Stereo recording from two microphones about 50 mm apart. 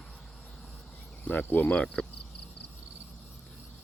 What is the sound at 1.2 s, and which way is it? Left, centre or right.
Speech, left.